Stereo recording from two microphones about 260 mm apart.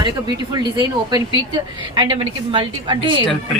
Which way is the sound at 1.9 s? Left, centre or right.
Centre.